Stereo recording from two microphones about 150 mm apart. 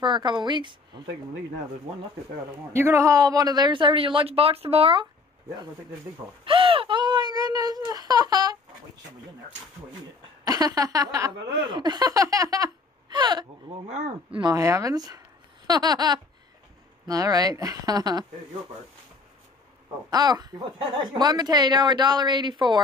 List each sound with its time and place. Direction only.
0.0 s speech: 30° right (ahead or behind)
2.7 s speech: 20° right (ahead or behind); by 5.0 s 40° right (ahead or behind)
6.4 s wail: 35° right (ahead or behind)
10.4 s speech: 25° right (ahead or behind)
13.8 s speech: 45° right (ahead or behind)
14.4 s speech: 20° right (ahead or behind)
20.1 s speech: 25° right (ahead or behind)